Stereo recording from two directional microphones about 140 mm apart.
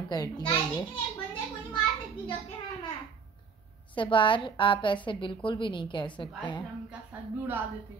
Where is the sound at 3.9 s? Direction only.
35° left (ahead or behind).